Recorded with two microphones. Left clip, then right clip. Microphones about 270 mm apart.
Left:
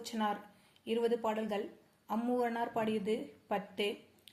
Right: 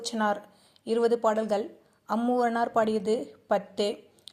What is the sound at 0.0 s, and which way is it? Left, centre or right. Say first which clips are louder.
Speech: right 8 dB; right.